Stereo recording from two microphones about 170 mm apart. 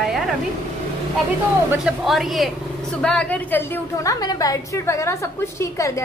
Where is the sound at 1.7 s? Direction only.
5° right (ahead or behind).